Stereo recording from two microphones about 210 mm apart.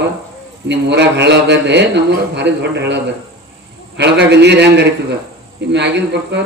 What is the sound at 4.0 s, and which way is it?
A man's voice, 55° right (ahead or behind).